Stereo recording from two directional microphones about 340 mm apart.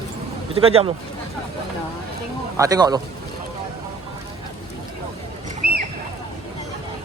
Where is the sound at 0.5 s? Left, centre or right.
Centre.